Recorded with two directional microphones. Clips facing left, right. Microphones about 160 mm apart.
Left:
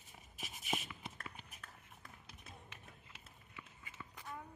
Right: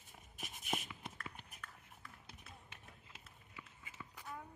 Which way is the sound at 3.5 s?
5° right (ahead or behind).